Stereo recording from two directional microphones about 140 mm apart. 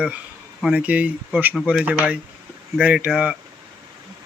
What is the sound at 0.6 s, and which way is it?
Speech, 10° right (ahead or behind).